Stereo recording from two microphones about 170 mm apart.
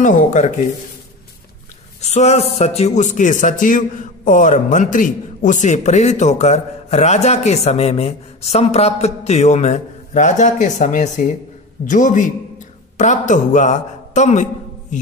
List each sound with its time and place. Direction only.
0.0 s a man's voice: 45° left (ahead or behind)
2.0 s a sound: 40° left (ahead or behind)
2.5 s a man's voice: 40° left (ahead or behind)